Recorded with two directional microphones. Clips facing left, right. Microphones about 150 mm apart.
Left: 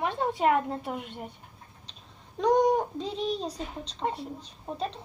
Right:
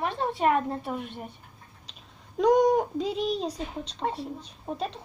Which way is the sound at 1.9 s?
10° right (ahead or behind).